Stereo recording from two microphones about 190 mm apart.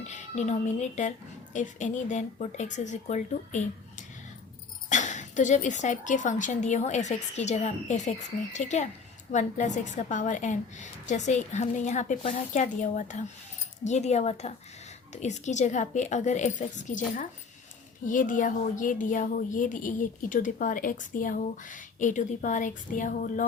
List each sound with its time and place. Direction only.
0.0 s a woman's voice: 40° left (ahead or behind)
18.0 s a woman's voice: 45° left (ahead or behind)